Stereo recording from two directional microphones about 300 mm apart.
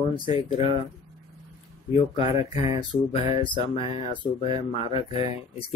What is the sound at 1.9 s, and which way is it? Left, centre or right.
Speech, centre.